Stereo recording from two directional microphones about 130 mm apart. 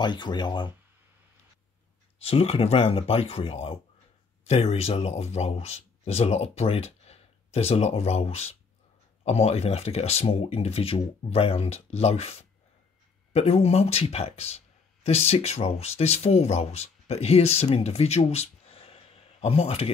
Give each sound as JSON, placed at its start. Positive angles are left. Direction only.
{"t": 0.0, "sound": "speech", "side_deg": 35}
{"t": 2.1, "sound": "speech", "side_deg": 50}